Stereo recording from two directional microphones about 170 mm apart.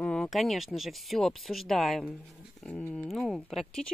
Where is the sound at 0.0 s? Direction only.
5° left (ahead or behind).